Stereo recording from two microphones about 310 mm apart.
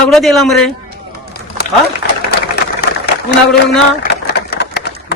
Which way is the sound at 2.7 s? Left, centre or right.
Left.